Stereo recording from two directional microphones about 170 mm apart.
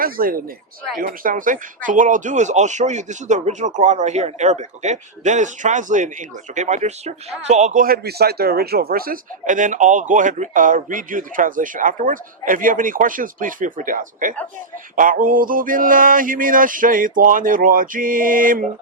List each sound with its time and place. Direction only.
0.0 s speech: 60° right (ahead or behind)